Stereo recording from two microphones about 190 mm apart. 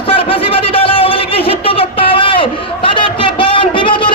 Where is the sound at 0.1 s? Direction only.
30° left (ahead or behind).